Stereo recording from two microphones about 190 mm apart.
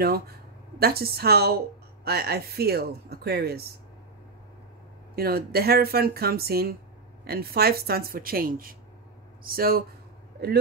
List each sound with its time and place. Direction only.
0.7 s speech: 55° right (ahead or behind)
5.1 s speech: 55° right (ahead or behind)